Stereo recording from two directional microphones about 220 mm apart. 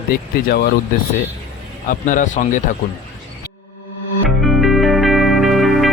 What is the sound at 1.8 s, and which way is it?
Speech, 35° left (ahead or behind).